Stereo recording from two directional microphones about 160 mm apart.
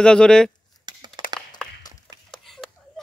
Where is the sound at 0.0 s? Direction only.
5° left (ahead or behind).